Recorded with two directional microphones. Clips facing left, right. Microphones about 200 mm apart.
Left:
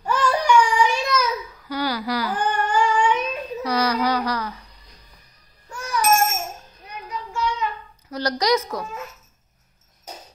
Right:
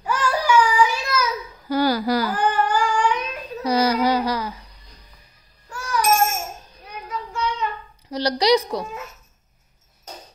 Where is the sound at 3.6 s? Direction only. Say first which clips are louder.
Right 3 dB; 25° right (ahead or behind).